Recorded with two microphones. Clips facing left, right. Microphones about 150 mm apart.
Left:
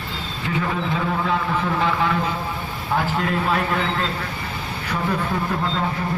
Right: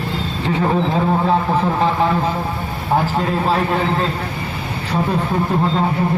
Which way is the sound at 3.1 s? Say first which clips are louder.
Right 4 dB; 35° right (ahead or behind).